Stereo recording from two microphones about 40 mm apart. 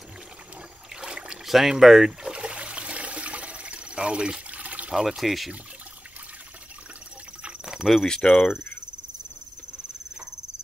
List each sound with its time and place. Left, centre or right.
1.0 s boat: centre
1.5 s speech: centre
2.2 s water: right
4.9 s speech: centre
7.6 s cricket: centre
8.1 s speech: centre